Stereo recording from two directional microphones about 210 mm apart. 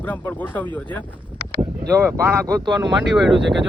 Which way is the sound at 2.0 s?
15° right (ahead or behind).